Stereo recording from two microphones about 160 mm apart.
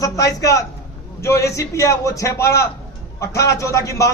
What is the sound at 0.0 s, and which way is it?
A man's voice, 20° left (ahead or behind).